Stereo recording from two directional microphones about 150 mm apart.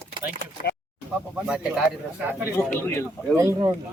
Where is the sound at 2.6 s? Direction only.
15° left (ahead or behind).